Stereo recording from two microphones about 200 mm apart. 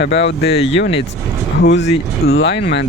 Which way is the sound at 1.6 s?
65° left (ahead or behind).